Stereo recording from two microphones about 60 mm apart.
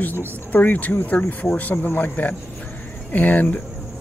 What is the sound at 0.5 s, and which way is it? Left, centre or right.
Speech, left.